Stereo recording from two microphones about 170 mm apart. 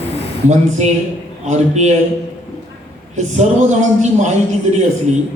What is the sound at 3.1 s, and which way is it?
A man's voice, 40° right (ahead or behind).